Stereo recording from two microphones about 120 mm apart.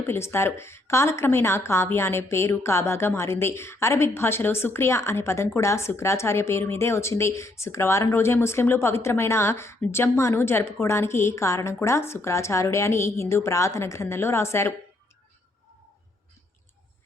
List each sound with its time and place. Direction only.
0.1 s a woman's voice: 20° left (ahead or behind)